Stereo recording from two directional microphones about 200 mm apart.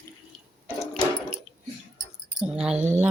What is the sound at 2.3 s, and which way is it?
Keys jangling, 5° right (ahead or behind).